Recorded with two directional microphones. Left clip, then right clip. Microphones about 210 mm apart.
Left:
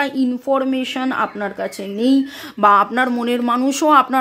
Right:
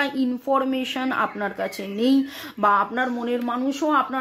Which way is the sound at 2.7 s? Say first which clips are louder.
Left 6 dB; 40° left (ahead or behind).